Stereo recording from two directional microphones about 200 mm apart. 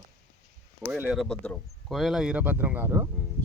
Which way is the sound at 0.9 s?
5° right (ahead or behind).